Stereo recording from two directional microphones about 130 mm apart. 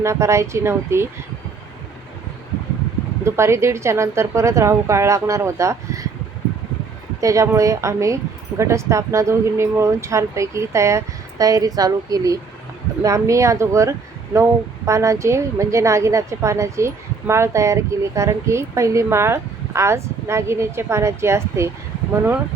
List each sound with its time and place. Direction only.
0.0 s a woman's voice: 20° right (ahead or behind)
3.2 s a woman's voice: 20° right (ahead or behind)
7.2 s a woman's voice: 25° right (ahead or behind)